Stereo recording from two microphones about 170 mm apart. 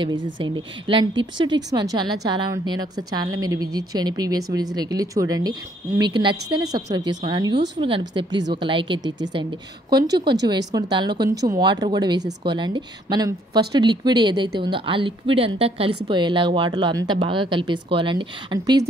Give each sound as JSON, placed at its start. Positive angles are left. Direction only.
{"t": 0.0, "sound": "speech", "side_deg": -30}